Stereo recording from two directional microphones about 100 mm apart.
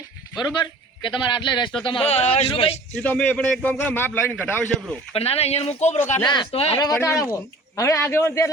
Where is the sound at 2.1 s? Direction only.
90° left.